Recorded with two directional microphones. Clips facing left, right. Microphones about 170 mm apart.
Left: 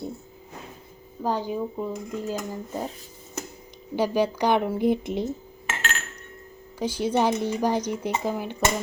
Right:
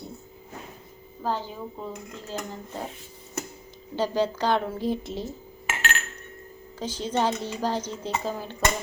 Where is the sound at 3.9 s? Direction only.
10° left (ahead or behind).